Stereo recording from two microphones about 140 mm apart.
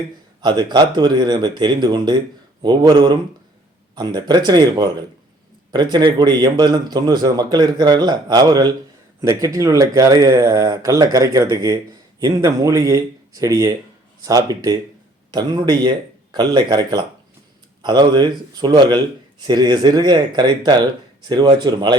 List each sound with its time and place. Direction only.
0.4 s a man's voice: 30° right (ahead or behind)